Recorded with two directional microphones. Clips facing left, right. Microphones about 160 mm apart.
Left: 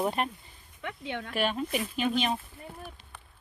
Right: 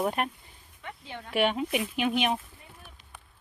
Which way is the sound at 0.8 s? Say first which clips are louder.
Left 5 dB; 75° left (ahead or behind).